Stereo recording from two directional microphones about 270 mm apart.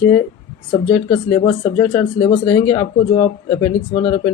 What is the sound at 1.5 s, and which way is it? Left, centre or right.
Speech, centre.